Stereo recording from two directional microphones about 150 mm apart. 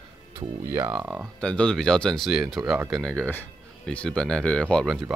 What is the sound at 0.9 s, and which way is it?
Speech, 5° right (ahead or behind).